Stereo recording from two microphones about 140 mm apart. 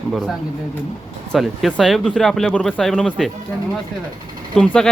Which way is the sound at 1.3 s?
Centre (ahead or behind).